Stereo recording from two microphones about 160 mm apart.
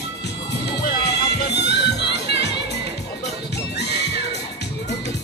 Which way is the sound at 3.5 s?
90° left.